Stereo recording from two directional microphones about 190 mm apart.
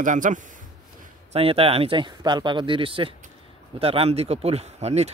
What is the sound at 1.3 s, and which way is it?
Speech, 30° right (ahead or behind).